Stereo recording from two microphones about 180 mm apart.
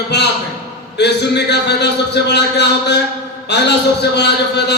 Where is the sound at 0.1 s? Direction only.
70° left (ahead or behind).